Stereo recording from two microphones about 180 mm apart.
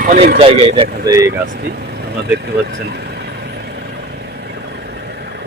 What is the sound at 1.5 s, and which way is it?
Vehicle, 60° right (ahead or behind).